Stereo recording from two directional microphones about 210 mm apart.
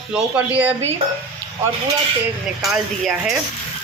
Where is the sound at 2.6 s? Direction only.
Centre (ahead or behind).